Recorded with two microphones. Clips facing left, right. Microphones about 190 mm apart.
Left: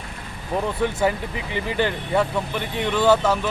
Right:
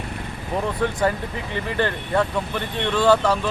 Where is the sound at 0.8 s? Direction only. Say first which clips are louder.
Even; 5° left (ahead or behind).